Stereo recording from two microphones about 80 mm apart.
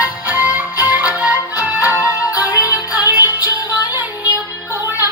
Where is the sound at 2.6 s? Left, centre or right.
Left.